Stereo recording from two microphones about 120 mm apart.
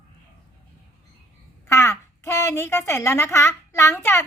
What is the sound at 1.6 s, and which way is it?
A woman's voice, 20° left (ahead or behind).